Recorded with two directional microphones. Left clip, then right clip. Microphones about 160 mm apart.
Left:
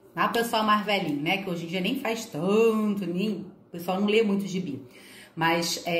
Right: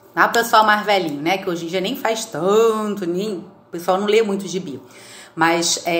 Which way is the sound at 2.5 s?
10° left (ahead or behind).